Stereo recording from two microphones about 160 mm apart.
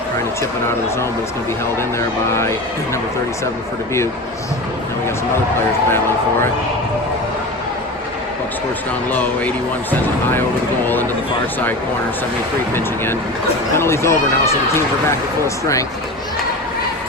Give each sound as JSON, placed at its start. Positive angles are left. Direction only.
{"t": 2.3, "sound": "speech", "side_deg": 15}
{"t": 13.7, "sound": "speech", "side_deg": 15}